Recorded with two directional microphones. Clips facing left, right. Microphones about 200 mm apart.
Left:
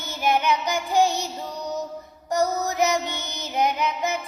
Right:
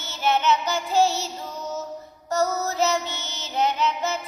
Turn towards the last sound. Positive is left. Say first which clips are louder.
# even
turn(degrees=15)  # may be behind; listen again after turning